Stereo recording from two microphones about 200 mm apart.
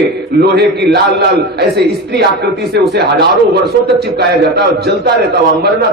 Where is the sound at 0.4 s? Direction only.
55° right (ahead or behind).